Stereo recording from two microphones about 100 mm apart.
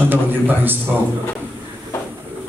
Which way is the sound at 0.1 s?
20° right (ahead or behind).